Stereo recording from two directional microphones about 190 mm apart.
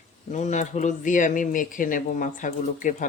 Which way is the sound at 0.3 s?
40° left (ahead or behind).